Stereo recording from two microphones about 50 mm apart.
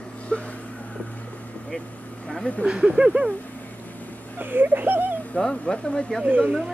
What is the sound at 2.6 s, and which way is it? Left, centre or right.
Speech, centre.